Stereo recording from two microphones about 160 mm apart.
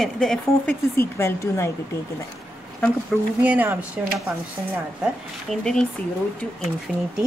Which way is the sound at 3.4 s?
10° right (ahead or behind).